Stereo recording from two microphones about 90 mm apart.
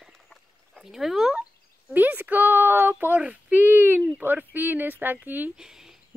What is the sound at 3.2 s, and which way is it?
Speech, 20° right (ahead or behind).